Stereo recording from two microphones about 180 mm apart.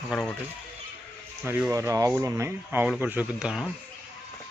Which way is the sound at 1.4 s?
15° right (ahead or behind).